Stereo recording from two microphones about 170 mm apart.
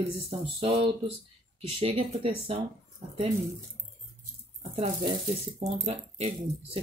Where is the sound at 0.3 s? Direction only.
35° right (ahead or behind).